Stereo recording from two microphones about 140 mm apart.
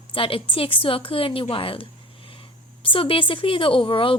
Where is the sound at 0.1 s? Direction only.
40° left (ahead or behind).